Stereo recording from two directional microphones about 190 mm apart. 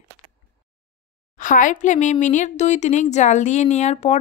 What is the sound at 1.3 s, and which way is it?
Speech, 45° left (ahead or behind).